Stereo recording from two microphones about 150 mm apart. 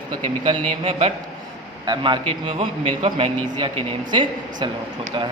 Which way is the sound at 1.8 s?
30° right (ahead or behind).